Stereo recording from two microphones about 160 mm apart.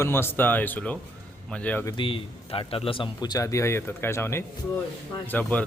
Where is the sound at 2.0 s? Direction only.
35° left (ahead or behind).